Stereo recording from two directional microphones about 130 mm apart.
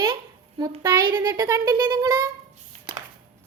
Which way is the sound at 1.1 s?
20° right (ahead or behind).